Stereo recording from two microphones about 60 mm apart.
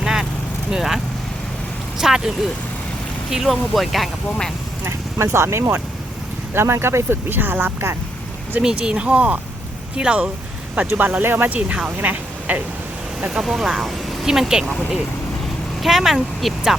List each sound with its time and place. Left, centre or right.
0.0 s vehicle: centre
0.7 s speech: centre
4.9 s speech: right
8.6 s speech: centre
10.8 s speech: right
13.3 s speech: centre